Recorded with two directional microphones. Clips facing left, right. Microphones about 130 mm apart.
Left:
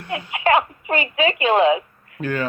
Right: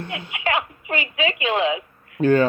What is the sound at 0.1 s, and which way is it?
Speech, 40° left (ahead or behind).